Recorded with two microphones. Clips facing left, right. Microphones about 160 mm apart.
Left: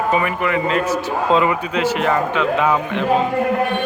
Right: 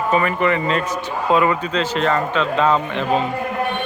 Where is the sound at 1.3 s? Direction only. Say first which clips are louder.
Right 1 dB; 20° left (ahead or behind).